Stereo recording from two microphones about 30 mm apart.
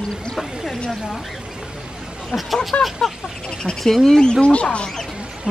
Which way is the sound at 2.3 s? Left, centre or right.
Left.